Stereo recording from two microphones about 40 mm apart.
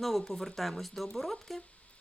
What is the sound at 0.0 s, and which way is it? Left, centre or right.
Speech, centre.